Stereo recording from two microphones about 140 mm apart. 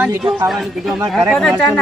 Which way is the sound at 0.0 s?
10° right (ahead or behind).